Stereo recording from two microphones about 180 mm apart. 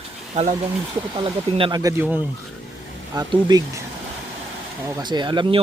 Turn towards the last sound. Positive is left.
turn(degrees=-25)  # may be behind; listen again after turning